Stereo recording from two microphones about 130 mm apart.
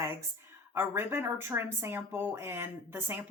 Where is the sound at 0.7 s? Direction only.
15° right (ahead or behind).